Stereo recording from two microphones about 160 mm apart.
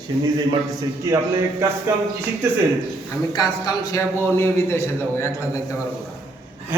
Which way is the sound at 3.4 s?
25° left (ahead or behind).